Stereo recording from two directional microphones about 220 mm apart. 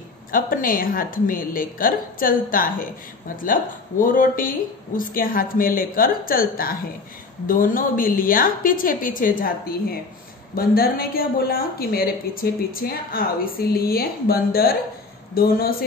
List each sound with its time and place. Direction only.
0.3 s a woman's voice: 40° left (ahead or behind)